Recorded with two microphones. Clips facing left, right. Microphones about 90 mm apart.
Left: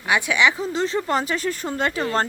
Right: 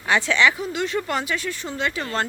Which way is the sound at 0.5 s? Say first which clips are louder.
Left 2 dB; 30° left (ahead or behind).